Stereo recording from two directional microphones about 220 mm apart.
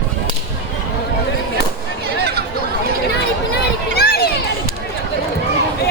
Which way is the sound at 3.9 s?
45° left (ahead or behind).